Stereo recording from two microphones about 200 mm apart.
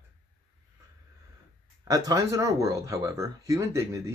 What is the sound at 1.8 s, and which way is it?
Speech, 20° right (ahead or behind).